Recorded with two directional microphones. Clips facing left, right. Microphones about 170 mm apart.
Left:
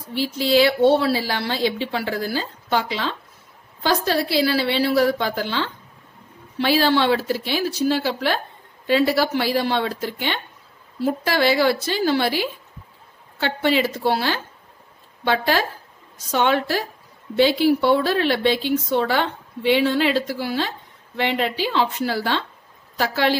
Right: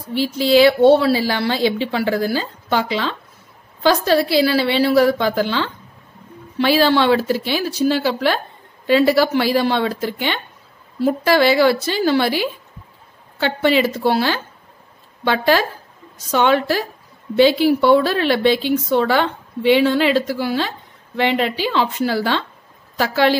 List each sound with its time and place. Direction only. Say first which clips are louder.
0.1 s a woman's voice: right 4 dB; 90° right